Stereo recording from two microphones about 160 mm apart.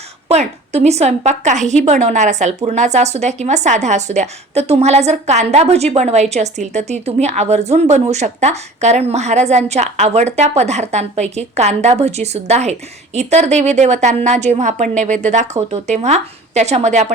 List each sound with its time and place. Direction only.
0.3 s a woman's voice: 40° right (ahead or behind)